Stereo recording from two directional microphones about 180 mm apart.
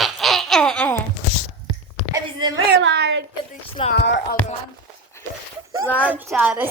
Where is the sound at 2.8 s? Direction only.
70° right (ahead or behind).